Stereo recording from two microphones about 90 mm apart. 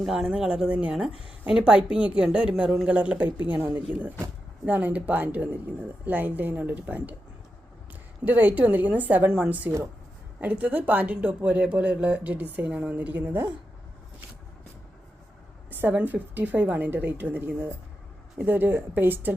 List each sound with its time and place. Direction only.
0.0 s a woman's voice: 5° right (ahead or behind)
8.2 s speech: 20° right (ahead or behind)
15.7 s a woman's voice: 20° right (ahead or behind)